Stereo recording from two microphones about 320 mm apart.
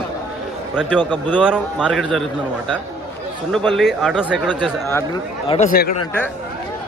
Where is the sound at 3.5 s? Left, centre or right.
Centre.